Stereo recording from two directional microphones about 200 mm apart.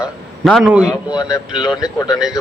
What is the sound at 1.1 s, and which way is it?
A man's voice, 20° left (ahead or behind).